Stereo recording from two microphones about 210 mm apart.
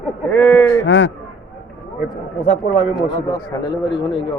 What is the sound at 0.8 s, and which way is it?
Speech, 60° left (ahead or behind).